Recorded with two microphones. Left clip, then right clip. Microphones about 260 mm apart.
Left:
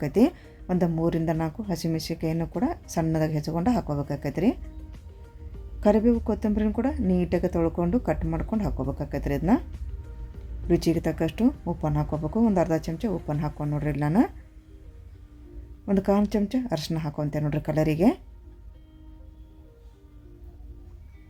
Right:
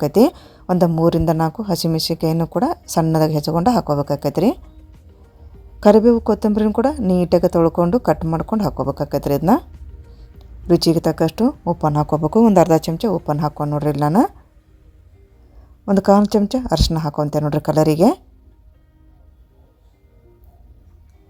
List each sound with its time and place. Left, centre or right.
0.0 s a woman's voice: right
5.8 s a woman's voice: right
10.7 s a woman's voice: right
15.9 s a woman's voice: right